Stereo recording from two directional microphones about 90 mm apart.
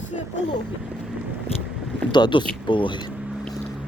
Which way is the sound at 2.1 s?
55° left (ahead or behind).